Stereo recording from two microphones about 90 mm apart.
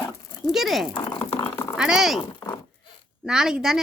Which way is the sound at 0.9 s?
65° left (ahead or behind).